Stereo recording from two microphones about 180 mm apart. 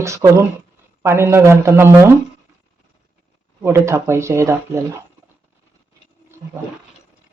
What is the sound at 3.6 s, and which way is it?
Speech, 15° right (ahead or behind).